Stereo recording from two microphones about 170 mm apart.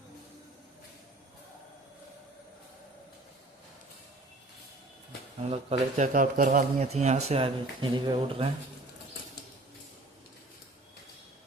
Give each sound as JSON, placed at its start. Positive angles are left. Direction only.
{"t": 5.4, "sound": "speech", "side_deg": -35}
{"t": 6.1, "sound": "speech", "side_deg": -50}